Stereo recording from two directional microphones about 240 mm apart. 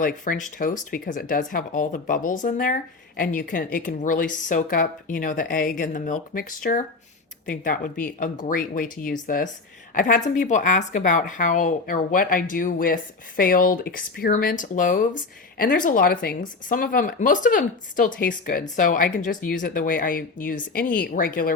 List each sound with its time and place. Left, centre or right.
0.0 s a woman's voice: left